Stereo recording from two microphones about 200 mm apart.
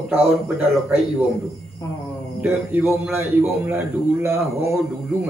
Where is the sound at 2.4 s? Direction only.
10° right (ahead or behind).